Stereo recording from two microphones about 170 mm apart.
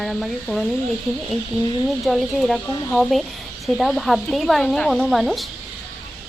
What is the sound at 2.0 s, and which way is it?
Speech, centre (ahead or behind).